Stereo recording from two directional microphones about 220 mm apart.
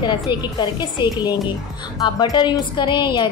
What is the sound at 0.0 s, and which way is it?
A woman's voice, 20° left (ahead or behind).